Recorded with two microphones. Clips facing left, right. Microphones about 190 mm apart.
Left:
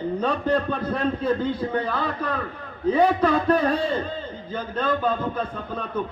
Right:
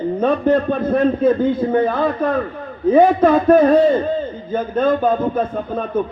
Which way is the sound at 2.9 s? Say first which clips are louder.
Right 7 dB; 50° right (ahead or behind).